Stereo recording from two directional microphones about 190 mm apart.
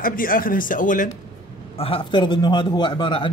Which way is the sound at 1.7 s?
30° left (ahead or behind).